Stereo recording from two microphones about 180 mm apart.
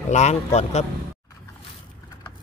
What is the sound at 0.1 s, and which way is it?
Speech, 40° left (ahead or behind).